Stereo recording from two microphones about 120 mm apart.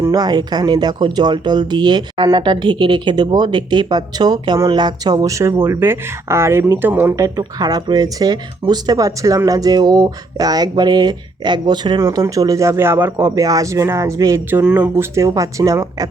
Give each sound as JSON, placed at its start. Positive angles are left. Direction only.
{"t": 0.0, "sound": "speech", "side_deg": -35}